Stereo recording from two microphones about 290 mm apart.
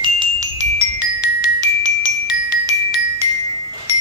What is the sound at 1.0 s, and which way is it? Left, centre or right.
Marimba, centre.